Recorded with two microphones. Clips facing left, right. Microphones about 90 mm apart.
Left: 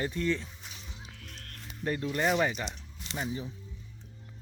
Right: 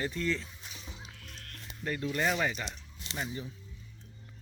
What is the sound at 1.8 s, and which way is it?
Speech, 25° left (ahead or behind).